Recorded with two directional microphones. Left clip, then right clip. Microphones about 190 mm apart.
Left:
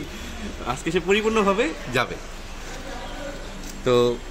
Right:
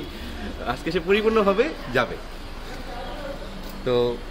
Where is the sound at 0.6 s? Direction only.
55° left (ahead or behind).